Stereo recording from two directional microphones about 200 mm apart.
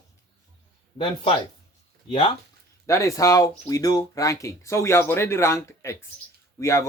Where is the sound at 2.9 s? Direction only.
15° left (ahead or behind).